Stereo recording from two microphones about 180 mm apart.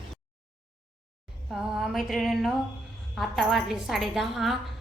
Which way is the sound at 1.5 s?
Centre (ahead or behind).